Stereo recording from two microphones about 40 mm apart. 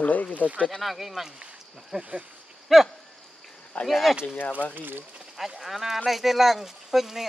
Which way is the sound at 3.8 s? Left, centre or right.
Centre.